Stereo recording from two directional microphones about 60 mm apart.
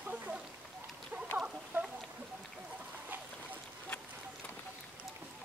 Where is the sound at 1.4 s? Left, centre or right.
Centre.